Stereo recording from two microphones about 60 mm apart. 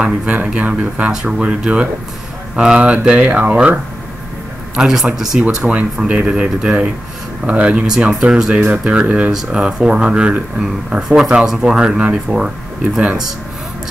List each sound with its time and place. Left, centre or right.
0.0 s speech: centre
5.5 s speech: centre